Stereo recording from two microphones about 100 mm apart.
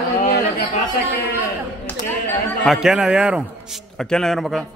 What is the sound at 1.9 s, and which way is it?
Speech, 15° left (ahead or behind).